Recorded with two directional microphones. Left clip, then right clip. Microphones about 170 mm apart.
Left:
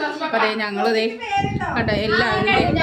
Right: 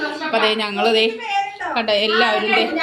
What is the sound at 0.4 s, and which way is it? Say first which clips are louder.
A woman's voice: right 5 dB; 5° left (ahead or behind).